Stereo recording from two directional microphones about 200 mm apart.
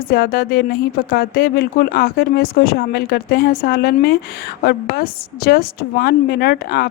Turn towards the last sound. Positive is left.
turn(degrees=50)  # may be behind; listen again after turning